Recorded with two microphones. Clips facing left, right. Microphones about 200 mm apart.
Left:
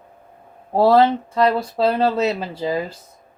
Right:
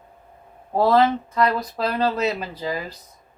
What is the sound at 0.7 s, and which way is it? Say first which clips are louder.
Speech: left 3 dB; 30° left (ahead or behind).